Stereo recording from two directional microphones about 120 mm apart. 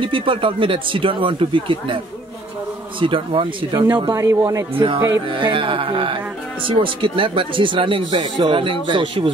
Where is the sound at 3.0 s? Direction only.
45° right (ahead or behind).